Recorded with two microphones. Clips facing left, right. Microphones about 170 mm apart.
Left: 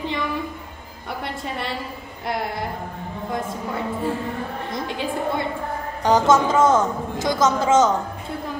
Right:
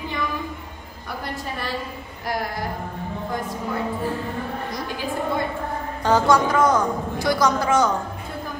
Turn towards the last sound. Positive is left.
turn(degrees=20)  # may be behind; listen again after turning